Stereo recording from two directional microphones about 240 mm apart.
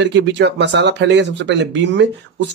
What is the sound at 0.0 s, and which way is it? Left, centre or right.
Speech, right.